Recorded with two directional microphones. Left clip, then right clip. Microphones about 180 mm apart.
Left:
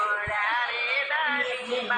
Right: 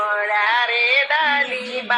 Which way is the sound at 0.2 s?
40° right (ahead or behind).